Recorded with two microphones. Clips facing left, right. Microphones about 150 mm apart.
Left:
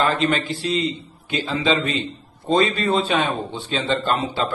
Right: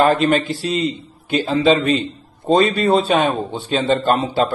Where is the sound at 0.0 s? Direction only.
45° right (ahead or behind).